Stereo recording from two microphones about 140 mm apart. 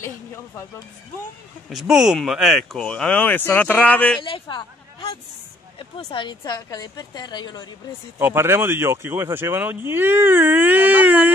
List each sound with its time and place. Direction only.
1.7 s speech: centre (ahead or behind)
4.2 s speech: 35° left (ahead or behind)
6.2 s a woman's voice: 30° left (ahead or behind)
8.2 s speech: 15° right (ahead or behind)